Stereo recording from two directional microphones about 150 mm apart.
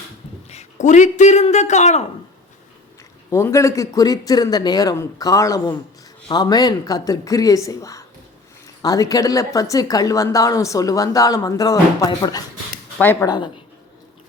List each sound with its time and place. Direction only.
0.5 s speech: 55° left (ahead or behind)
3.2 s a woman's voice: 20° left (ahead or behind)
13.0 s speech: 15° left (ahead or behind)
13.2 s a woman's voice: 30° left (ahead or behind)